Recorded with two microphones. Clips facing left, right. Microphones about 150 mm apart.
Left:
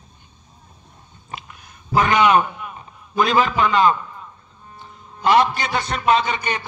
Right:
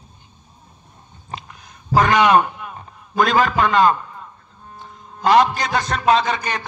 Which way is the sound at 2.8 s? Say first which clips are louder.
Right 2 dB; 45° right (ahead or behind).